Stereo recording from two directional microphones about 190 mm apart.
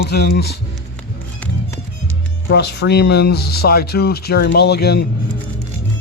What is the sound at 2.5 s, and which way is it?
Speech, 60° left (ahead or behind).